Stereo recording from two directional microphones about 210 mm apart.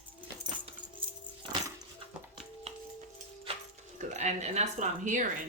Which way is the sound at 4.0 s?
35° right (ahead or behind).